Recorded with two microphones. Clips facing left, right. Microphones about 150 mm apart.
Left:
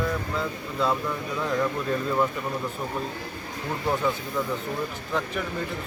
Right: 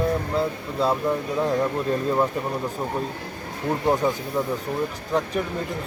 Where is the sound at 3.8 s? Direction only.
40° right (ahead or behind).